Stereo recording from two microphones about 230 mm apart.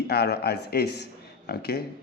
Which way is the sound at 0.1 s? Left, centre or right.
Left.